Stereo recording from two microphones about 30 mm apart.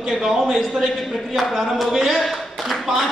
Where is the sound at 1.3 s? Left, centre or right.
Centre.